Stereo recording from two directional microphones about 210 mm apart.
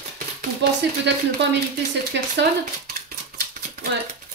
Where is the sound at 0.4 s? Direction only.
55° right (ahead or behind).